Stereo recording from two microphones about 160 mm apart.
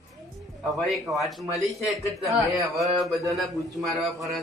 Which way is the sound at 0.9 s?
Centre (ahead or behind).